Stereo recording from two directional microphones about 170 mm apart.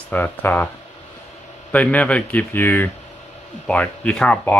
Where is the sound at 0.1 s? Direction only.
10° left (ahead or behind).